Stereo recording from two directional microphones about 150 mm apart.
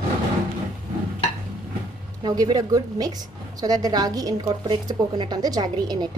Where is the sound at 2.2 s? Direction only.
25° right (ahead or behind).